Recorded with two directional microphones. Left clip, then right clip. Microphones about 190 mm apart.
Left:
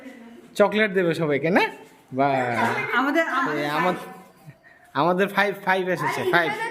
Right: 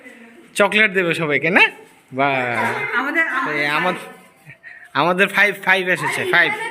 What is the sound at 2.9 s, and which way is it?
Speech, 80° left.